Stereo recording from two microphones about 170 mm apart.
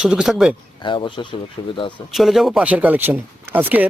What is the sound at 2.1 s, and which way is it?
Speech, centre (ahead or behind).